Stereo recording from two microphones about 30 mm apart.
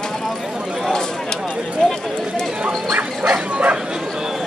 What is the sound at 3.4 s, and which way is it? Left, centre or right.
Bow-wow, right.